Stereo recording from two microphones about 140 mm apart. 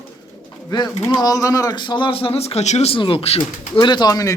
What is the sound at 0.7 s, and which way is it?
Speech, 30° left (ahead or behind).